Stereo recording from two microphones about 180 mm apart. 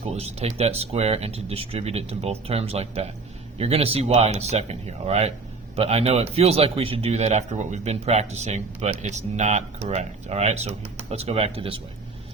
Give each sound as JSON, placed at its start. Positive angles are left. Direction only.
{"t": 0.0, "sound": "a man's voice", "side_deg": -35}